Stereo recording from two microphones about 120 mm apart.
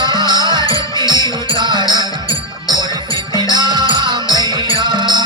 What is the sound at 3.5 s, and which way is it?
Music, 35° right (ahead or behind).